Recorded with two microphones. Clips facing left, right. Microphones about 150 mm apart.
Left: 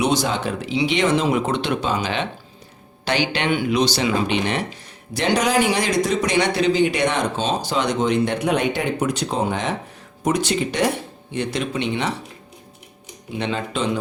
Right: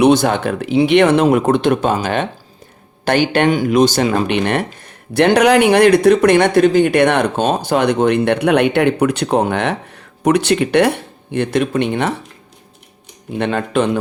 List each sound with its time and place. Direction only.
0.0 s speech: 60° right (ahead or behind)
13.4 s speech: 55° right (ahead or behind)